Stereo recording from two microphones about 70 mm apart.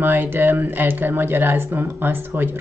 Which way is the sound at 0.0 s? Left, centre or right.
Right.